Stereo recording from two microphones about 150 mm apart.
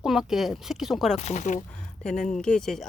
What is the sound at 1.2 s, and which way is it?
Speech, 50° left (ahead or behind).